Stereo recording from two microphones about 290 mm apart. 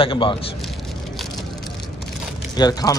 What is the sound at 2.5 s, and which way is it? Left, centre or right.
Speech, centre.